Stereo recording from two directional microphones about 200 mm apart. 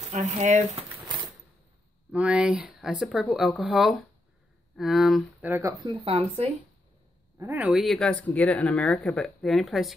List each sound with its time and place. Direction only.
0.1 s speech: 35° right (ahead or behind)
2.1 s speech: 5° right (ahead or behind)
6.0 s speech: 30° right (ahead or behind)
7.3 s speech: 10° right (ahead or behind)